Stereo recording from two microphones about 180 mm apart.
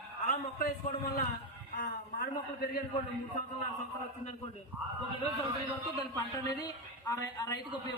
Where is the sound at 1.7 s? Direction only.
60° left (ahead or behind).